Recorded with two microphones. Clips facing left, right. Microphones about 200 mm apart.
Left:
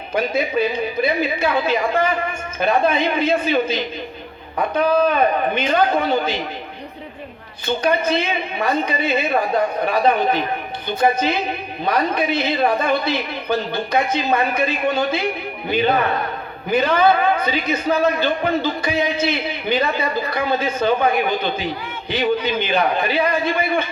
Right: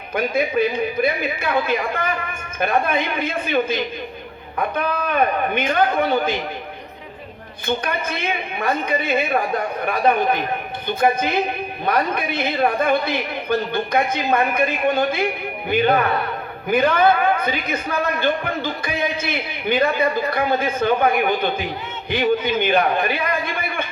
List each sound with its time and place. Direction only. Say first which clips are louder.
0.1 s a man's voice: even; 55° right (ahead or behind)
5.0 s a man's voice: left 3 dB; 55° right (ahead or behind)
7.7 s a man's voice: left 5 dB; 55° right (ahead or behind)